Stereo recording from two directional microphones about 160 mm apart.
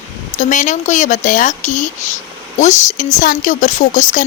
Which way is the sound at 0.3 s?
50° left (ahead or behind).